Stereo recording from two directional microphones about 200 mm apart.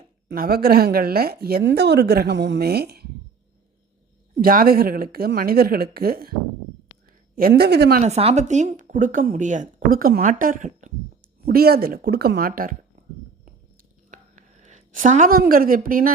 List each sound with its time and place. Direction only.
0.3 s a woman's voice: 50° right (ahead or behind)
4.4 s a woman's voice: 45° right (ahead or behind)
7.3 s a woman's voice: 50° right (ahead or behind)
8.0 s speech: 30° right (ahead or behind)
11.4 s a woman's voice: 50° right (ahead or behind)
14.1 s a sound: 40° right (ahead or behind)